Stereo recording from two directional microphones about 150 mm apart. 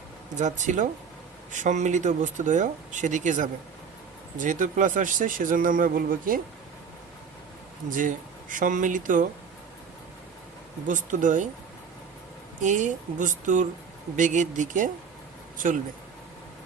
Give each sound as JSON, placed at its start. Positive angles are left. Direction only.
{"t": 0.3, "sound": "a man's voice", "side_deg": -55}
{"t": 7.9, "sound": "a man's voice", "side_deg": -60}
{"t": 10.8, "sound": "a man's voice", "side_deg": -60}
{"t": 12.6, "sound": "a man's voice", "side_deg": -55}